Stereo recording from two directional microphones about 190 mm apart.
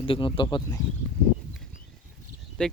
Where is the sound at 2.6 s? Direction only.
5° left (ahead or behind).